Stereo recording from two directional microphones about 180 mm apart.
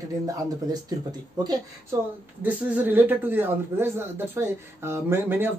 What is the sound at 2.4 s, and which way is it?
Speech, 10° right (ahead or behind).